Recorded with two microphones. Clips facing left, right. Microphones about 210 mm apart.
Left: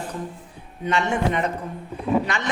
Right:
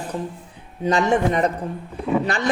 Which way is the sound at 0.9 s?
35° right (ahead or behind).